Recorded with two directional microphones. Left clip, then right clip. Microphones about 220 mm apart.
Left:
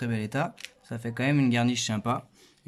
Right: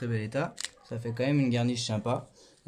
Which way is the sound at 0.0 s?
45° left (ahead or behind).